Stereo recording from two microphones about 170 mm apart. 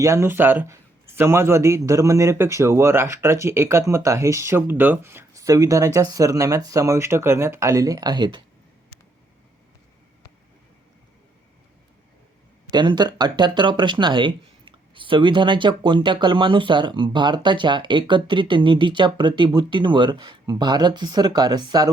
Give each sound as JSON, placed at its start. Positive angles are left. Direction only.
{"t": 0.0, "sound": "speech", "side_deg": -15}
{"t": 12.7, "sound": "speech", "side_deg": -25}